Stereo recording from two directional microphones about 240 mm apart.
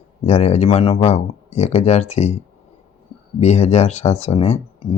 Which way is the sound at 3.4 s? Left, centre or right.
Left.